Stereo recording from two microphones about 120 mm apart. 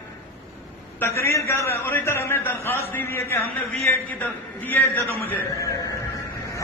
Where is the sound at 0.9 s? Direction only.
20° left (ahead or behind).